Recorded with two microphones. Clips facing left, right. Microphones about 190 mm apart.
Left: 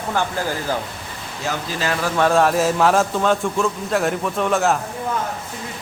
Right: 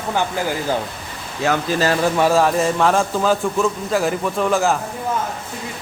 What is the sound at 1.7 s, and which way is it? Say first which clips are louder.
Speech: right 3 dB; 40° right (ahead or behind).